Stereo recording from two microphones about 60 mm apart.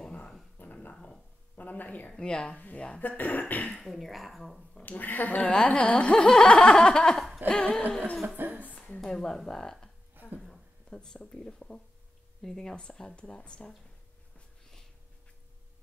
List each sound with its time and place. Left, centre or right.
0.6 s a sound: left
1.6 s speech: left
2.1 s speech: centre
3.8 s speech: centre
4.8 s speech: left
8.4 s a sound: right
8.7 s speech: centre
10.2 s a sound: right
10.9 s speech: centre